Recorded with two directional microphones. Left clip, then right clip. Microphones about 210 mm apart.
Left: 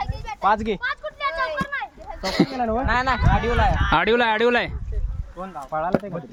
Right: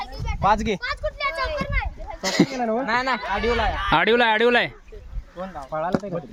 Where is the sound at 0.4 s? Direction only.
50° right (ahead or behind).